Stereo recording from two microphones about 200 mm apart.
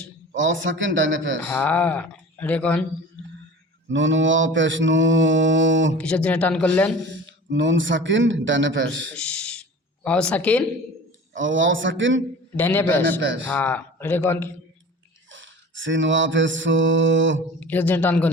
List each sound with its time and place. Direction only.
0.3 s a man's voice: 70° right (ahead or behind)
1.5 s speech: 10° left (ahead or behind)
3.9 s a man's voice: 70° right (ahead or behind)
6.0 s speech: 5° left (ahead or behind)
7.1 s a man's voice: 65° right (ahead or behind)
9.1 s a sound: 5° left (ahead or behind)
11.3 s a man's voice: 70° right (ahead or behind)
12.5 s speech: 10° left (ahead or behind)
13.1 s a man's voice: 65° right (ahead or behind)
13.5 s speech: 10° left (ahead or behind)
15.3 s mantra: 70° right (ahead or behind)
17.6 s speech: 10° left (ahead or behind)